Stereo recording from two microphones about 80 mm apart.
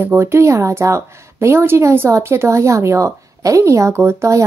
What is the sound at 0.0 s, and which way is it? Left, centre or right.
A woman's voice, right.